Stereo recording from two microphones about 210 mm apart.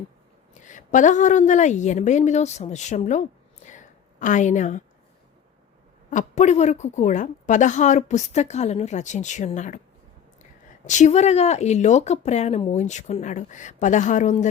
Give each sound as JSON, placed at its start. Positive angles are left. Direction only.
{"t": 0.5, "sound": "a woman's voice", "side_deg": 35}
{"t": 6.1, "sound": "a woman's voice", "side_deg": 35}
{"t": 10.8, "sound": "a woman's voice", "side_deg": 35}